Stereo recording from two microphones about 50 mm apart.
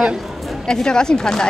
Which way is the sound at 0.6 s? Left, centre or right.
Centre.